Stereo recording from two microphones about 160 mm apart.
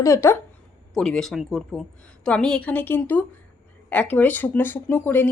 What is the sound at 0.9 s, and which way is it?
A woman's voice, 5° left (ahead or behind).